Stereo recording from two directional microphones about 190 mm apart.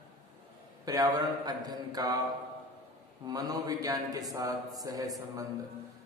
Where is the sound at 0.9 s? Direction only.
20° right (ahead or behind).